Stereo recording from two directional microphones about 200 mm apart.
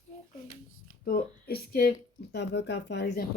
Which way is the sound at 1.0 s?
50° left (ahead or behind).